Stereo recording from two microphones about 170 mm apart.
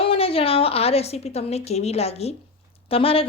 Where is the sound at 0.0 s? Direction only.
35° left (ahead or behind).